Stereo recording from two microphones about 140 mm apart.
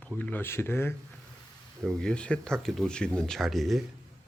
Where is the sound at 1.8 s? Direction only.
5° left (ahead or behind).